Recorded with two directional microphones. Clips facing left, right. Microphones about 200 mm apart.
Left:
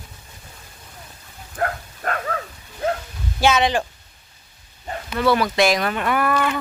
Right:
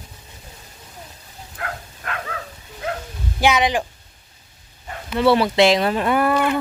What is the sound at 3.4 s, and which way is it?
Speech, 15° right (ahead or behind).